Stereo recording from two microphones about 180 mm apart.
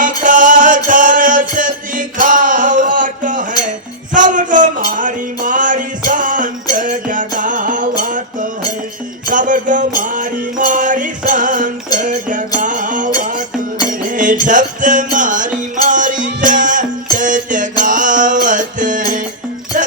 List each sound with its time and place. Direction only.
0.2 s music: 45° right (ahead or behind)